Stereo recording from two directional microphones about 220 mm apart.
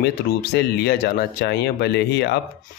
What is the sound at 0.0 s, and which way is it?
Speech, 45° left (ahead or behind).